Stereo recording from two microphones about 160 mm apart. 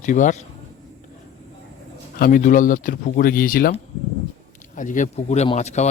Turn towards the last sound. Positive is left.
turn(degrees=45)  # may be behind; listen again after turning